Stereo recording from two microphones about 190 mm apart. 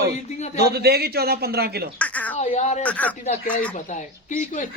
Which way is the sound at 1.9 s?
10° left (ahead or behind).